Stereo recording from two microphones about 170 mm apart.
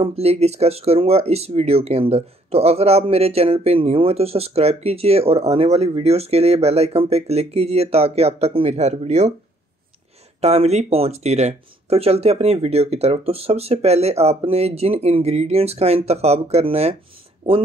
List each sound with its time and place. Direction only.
0.0 s speech: 35° right (ahead or behind)
10.4 s speech: 40° right (ahead or behind)